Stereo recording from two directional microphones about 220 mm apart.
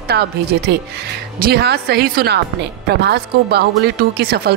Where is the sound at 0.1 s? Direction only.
45° right (ahead or behind).